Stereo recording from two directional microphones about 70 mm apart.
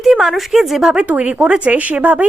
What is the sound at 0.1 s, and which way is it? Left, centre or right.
A woman's voice, centre.